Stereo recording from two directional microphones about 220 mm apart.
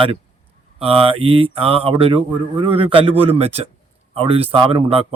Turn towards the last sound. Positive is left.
turn(degrees=-25)  # may be behind; listen again after turning